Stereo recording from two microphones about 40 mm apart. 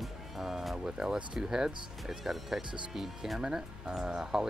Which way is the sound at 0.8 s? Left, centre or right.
Right.